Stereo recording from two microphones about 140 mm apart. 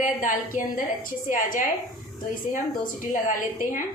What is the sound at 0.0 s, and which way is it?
A woman's voice, 70° left (ahead or behind).